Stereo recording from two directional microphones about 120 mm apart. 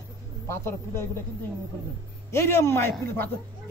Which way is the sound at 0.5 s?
20° left (ahead or behind).